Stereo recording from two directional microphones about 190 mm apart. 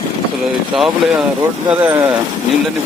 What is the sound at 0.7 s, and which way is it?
Speech, centre (ahead or behind).